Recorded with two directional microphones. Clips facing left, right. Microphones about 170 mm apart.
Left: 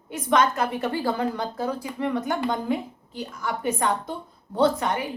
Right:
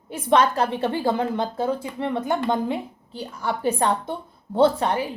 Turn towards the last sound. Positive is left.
turn(degrees=-30)  # may be behind; listen again after turning